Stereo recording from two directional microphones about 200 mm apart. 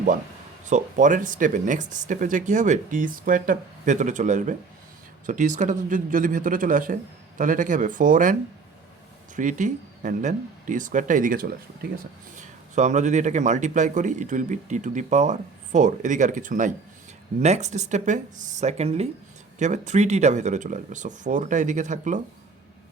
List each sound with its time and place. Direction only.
0.6 s speech: 40° right (ahead or behind)